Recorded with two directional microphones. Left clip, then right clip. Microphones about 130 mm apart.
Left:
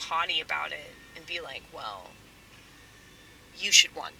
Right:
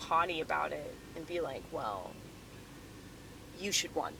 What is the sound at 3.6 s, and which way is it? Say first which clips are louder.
Speech: left 12 dB; 35° left (ahead or behind).